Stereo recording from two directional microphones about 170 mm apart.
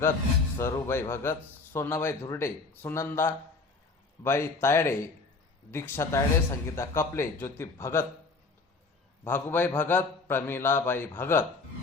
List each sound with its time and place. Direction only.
0.6 s speech: 15° left (ahead or behind)
9.2 s speech: 10° left (ahead or behind)